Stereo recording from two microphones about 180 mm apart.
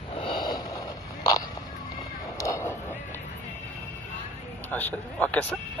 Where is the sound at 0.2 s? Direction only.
25° left (ahead or behind).